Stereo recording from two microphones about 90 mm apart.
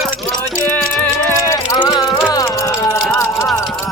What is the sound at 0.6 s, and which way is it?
Music, 15° left (ahead or behind).